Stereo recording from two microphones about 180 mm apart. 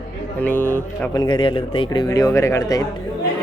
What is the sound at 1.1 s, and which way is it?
Speech, 25° left (ahead or behind).